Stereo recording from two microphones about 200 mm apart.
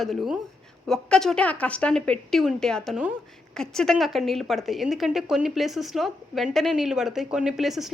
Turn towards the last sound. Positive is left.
turn(degrees=0)  # may be behind; listen again after turning